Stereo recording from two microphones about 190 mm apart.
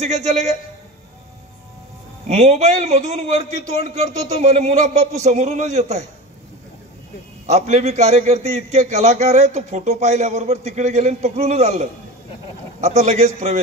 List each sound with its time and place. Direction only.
0.0 s a man's voice: 35° right (ahead or behind)
2.2 s a man's voice: 35° right (ahead or behind)
7.4 s a man's voice: 35° right (ahead or behind)